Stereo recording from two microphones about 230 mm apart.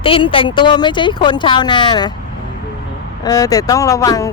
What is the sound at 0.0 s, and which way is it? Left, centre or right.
Speech, left.